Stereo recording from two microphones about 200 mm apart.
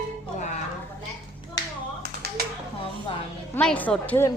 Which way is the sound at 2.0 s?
50° right (ahead or behind).